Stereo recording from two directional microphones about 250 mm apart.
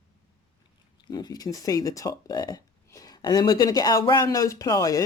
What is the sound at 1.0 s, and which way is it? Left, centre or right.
Speech, centre.